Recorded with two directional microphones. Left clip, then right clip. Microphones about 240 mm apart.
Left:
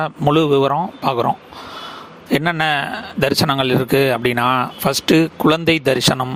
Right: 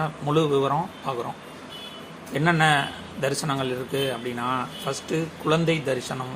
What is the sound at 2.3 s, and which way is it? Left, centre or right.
A man's voice, left.